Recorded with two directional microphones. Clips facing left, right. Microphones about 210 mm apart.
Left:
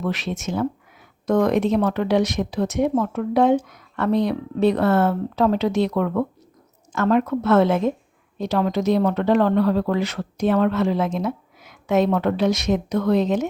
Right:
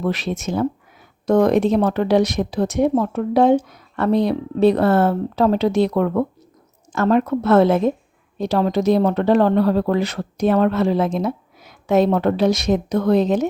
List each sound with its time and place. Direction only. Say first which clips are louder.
0.0 s speech: right 3 dB; 35° right (ahead or behind)